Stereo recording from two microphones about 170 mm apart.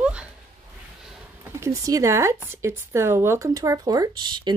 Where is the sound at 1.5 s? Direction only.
20° right (ahead or behind).